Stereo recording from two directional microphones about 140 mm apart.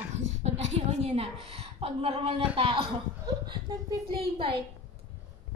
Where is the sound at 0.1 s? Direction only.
55° right (ahead or behind).